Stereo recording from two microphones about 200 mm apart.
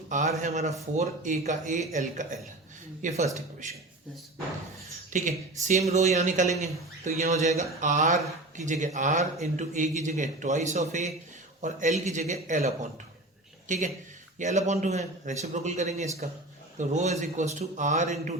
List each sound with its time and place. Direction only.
0.1 s speech: 35° right (ahead or behind)
5.1 s speech: 40° right (ahead or behind)